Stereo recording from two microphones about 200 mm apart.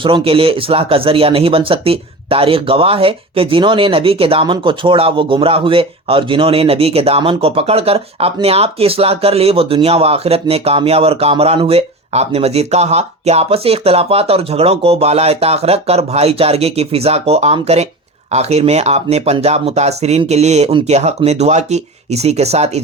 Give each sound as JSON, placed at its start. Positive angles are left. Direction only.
{"t": 0.0, "sound": "speech", "side_deg": -25}